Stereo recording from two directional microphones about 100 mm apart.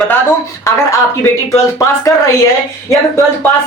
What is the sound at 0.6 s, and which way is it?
Speech, 30° left (ahead or behind).